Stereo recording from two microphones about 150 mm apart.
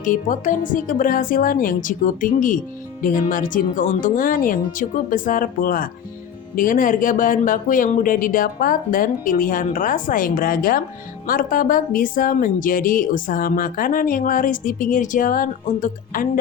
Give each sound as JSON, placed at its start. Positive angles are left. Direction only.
{"t": 0.0, "sound": "speech", "side_deg": 60}